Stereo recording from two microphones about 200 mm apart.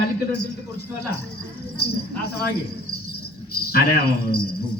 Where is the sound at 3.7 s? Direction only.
50° left (ahead or behind).